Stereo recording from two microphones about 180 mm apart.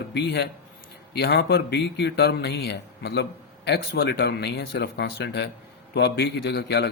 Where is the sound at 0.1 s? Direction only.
65° left (ahead or behind).